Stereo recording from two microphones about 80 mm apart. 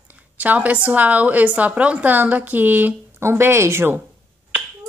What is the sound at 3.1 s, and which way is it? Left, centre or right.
Speech, right.